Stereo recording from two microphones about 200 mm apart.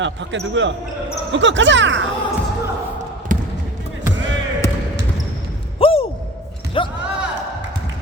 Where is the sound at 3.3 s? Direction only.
40° right (ahead or behind).